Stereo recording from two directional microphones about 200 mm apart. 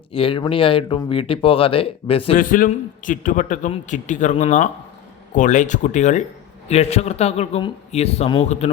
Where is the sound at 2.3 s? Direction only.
45° left (ahead or behind).